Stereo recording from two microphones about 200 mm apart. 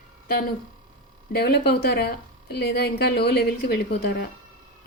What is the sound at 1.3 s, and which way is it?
A woman's voice, 50° left (ahead or behind).